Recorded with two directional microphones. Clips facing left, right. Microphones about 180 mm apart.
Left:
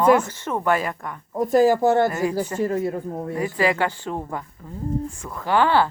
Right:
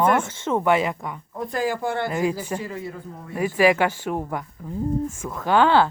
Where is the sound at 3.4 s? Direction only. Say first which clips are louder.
Right 4 dB; 15° right (ahead or behind).